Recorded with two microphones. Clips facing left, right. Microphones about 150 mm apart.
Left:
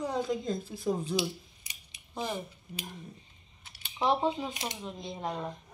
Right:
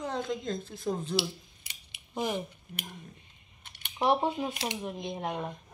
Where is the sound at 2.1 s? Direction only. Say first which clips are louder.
Right 3 dB; 10° right (ahead or behind).